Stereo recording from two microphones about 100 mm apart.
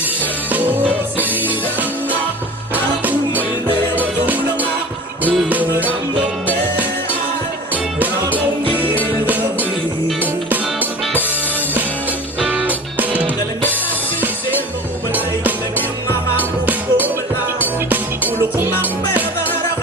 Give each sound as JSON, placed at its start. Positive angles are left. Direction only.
{"t": 0.2, "sound": "music", "side_deg": -15}
{"t": 7.7, "sound": "music", "side_deg": -15}
{"t": 12.4, "sound": "music", "side_deg": -15}
{"t": 16.4, "sound": "music", "side_deg": -15}
{"t": 18.5, "sound": "music", "side_deg": -20}